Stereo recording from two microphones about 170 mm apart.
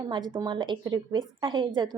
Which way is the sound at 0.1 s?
25° right (ahead or behind).